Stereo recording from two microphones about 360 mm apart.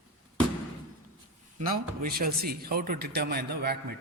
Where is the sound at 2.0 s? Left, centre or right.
Right.